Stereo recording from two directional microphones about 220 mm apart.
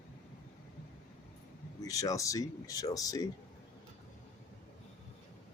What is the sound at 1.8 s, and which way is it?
Speech, 15° left (ahead or behind).